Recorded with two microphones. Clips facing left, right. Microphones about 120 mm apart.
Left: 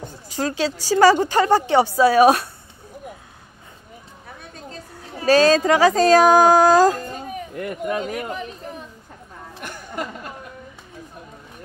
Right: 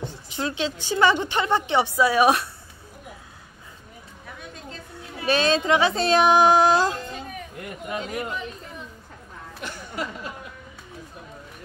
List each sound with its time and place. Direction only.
0.0 s a woman's voice: 45° left (ahead or behind)
4.4 s a woman's voice: 35° left (ahead or behind)
9.6 s a sound: 50° left (ahead or behind)